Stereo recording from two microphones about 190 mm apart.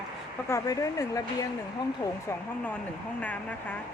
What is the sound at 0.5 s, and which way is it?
Speech, 15° left (ahead or behind).